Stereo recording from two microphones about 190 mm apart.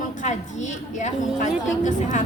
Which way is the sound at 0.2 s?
40° left (ahead or behind).